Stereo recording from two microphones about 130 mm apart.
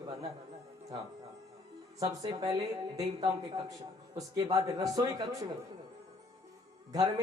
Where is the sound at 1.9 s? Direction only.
30° right (ahead or behind).